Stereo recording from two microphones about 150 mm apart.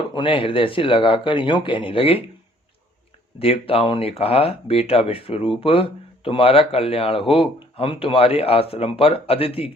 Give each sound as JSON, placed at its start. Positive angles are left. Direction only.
{"t": 0.1, "sound": "speech", "side_deg": 35}
{"t": 3.3, "sound": "speech", "side_deg": 40}